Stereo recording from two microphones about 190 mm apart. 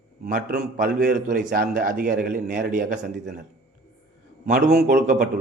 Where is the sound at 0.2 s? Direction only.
50° right (ahead or behind).